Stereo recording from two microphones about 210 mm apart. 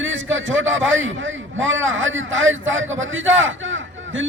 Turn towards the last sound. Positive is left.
turn(degrees=-65)  # may be behind; listen again after turning